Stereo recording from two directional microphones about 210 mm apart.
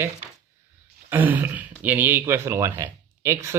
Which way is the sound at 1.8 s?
10° right (ahead or behind).